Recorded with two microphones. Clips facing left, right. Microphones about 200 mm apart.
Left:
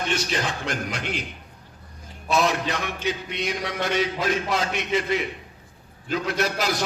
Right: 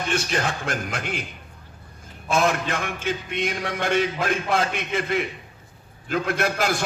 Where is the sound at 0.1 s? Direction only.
50° right (ahead or behind).